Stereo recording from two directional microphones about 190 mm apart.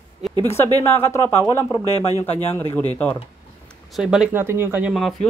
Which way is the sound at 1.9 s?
30° left (ahead or behind).